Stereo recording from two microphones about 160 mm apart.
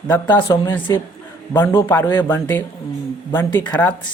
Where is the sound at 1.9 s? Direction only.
15° left (ahead or behind).